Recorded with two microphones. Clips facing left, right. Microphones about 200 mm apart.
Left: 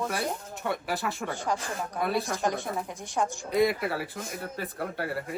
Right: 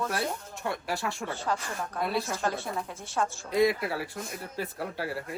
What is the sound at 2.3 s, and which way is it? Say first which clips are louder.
A woman's voice: left 2 dB; 15° left (ahead or behind).